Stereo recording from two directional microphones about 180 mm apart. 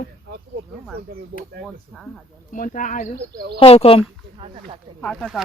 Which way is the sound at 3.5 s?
35° left (ahead or behind).